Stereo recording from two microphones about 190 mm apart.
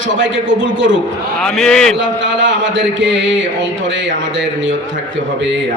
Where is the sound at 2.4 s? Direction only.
75° right (ahead or behind).